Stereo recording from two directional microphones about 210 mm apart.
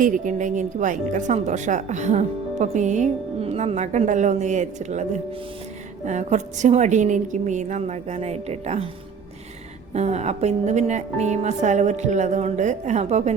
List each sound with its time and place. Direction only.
0.0 s a woman's voice: 35° right (ahead or behind)
9.9 s a woman's voice: 30° right (ahead or behind)